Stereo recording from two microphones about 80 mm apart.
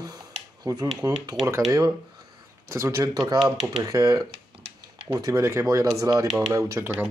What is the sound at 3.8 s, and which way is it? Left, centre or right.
Speech, right.